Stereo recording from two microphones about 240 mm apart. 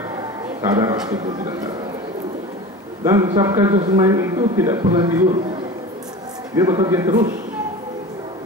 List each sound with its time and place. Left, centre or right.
0.6 s a man's voice: centre
3.0 s speech: centre
3.7 s a man's voice: right
4.0 s speech: centre
6.5 s speech: centre